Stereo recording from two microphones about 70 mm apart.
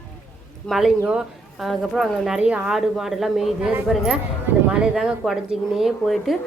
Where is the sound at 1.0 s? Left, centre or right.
Centre.